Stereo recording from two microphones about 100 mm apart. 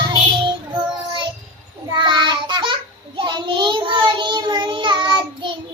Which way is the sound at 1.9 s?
50° right (ahead or behind).